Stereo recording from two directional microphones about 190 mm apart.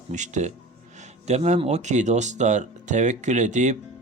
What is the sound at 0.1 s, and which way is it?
Speech, 40° right (ahead or behind).